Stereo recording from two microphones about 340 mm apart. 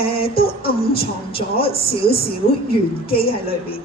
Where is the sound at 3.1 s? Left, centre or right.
Centre.